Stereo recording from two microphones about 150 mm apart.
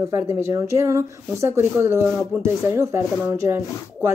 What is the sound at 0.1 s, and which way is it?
Speech, 15° right (ahead or behind).